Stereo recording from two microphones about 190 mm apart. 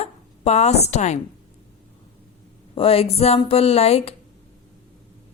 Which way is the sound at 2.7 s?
30° left (ahead or behind).